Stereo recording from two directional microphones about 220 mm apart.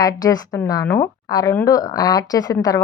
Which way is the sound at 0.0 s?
15° left (ahead or behind).